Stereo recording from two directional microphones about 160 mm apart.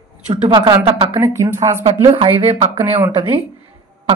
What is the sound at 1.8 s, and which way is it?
Speech, 35° right (ahead or behind).